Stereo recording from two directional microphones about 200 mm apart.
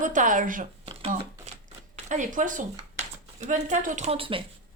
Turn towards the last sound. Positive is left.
turn(degrees=-25)  # may be behind; listen again after turning